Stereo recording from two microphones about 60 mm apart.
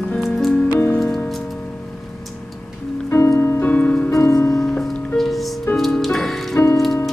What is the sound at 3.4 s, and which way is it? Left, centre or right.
Music, left.